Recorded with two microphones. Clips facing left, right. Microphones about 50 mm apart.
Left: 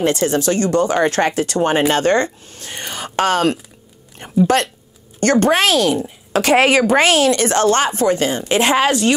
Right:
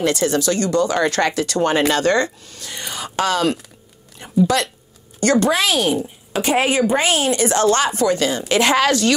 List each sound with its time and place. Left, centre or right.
0.4 s speech: left